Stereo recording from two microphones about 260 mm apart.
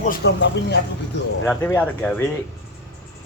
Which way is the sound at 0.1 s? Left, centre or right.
Left.